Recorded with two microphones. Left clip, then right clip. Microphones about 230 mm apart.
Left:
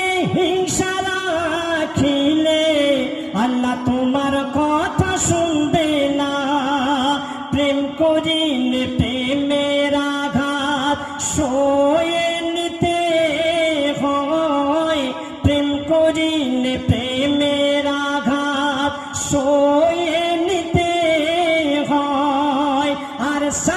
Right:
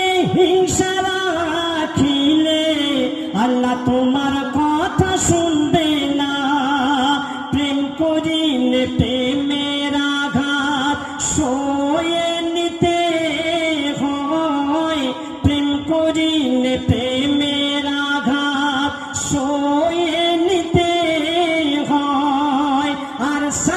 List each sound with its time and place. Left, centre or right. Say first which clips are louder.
0.2 s music: right 4 dB; centre
3.8 s music: right 1 dB; centre
5.7 s music: right 1 dB; centre
12.8 s music: left 1 dB; centre
14.3 s music: right 1 dB; centre
15.4 s music: left 1 dB; centre
20.0 s music: right 1 dB; centre